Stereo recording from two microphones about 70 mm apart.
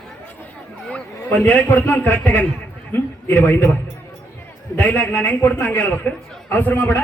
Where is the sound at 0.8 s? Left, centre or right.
Centre.